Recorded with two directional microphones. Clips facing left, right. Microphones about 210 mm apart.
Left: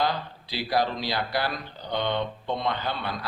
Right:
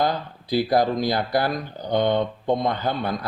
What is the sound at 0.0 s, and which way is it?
Speech, 45° right (ahead or behind).